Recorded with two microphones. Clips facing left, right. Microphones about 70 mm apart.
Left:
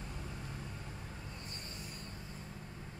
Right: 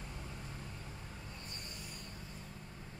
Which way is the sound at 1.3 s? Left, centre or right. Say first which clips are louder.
Left 1 dB; left.